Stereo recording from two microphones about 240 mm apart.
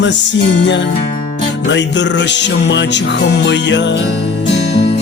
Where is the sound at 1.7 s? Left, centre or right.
Left.